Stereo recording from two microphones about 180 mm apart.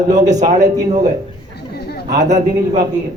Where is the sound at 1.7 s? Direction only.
60° left (ahead or behind).